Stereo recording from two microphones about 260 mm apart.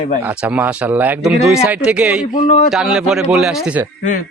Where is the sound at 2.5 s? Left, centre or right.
Left.